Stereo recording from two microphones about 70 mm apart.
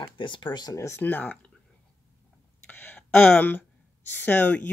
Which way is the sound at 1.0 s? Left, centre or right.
Left.